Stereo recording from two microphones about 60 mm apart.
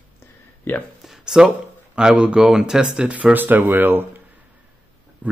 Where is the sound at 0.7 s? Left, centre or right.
Left.